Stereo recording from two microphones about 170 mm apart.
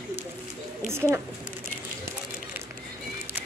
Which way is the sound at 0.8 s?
15° right (ahead or behind).